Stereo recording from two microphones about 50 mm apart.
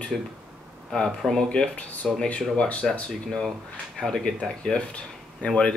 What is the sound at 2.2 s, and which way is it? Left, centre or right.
Speech, left.